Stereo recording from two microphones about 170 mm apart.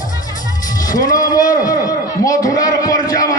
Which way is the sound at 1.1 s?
20° left (ahead or behind).